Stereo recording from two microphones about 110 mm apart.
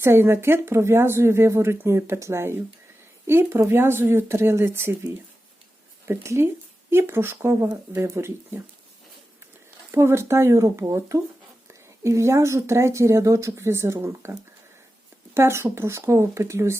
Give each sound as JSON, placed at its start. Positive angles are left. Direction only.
{"t": 0.0, "sound": "a woman's voice", "side_deg": -20}
{"t": 6.1, "sound": "a woman's voice", "side_deg": -25}
{"t": 9.9, "sound": "a woman's voice", "side_deg": -25}
{"t": 15.4, "sound": "a woman's voice", "side_deg": -25}